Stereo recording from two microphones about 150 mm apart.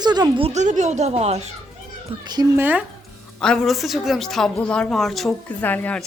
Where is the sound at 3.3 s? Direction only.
5° left (ahead or behind).